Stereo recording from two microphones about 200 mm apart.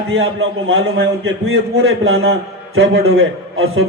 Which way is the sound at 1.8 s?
90° right.